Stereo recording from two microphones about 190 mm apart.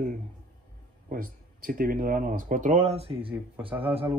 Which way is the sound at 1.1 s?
50° right (ahead or behind).